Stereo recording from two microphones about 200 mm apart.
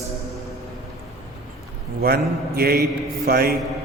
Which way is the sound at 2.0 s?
50° right (ahead or behind).